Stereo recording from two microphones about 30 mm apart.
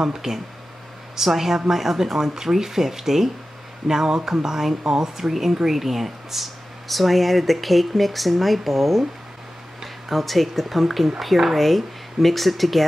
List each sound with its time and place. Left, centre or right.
0.0 s speech: centre
10.0 s speech: centre